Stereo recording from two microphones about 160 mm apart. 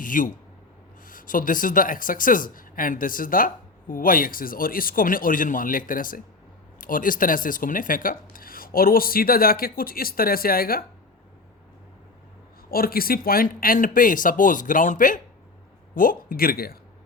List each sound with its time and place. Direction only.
0.0 s a man's voice: 55° left (ahead or behind)
12.7 s speech: 70° left (ahead or behind)